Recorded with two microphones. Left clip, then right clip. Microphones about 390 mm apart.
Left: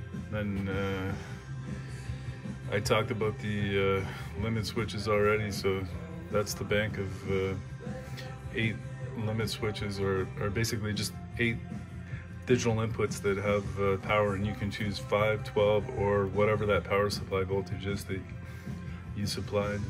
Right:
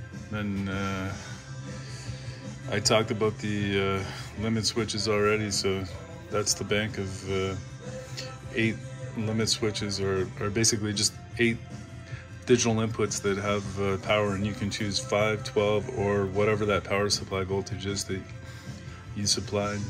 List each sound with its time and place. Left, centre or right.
0.3 s speech: centre
2.7 s speech: centre
8.2 s music: centre
9.4 s speech: centre
19.2 s speech: centre